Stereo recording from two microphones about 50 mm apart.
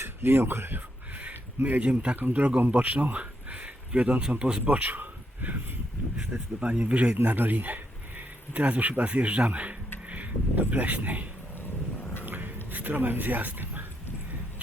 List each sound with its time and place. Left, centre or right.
0.0 s speech: right
1.8 s speech: right
2.1 s a man's voice: right; by 4.6 s centre
4.6 s speech: right
6.1 s speech: right
7.3 s a man's voice: right
12.2 s a sound: right